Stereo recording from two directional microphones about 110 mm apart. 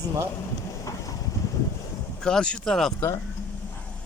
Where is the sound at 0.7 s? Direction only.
30° left (ahead or behind).